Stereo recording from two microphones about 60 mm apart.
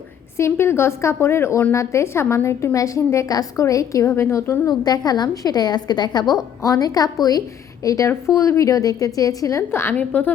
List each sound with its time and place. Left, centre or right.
0.3 s a woman's voice: left
4.1 s a woman's voice: left
7.9 s a woman's voice: left
9.9 s a woman's voice: left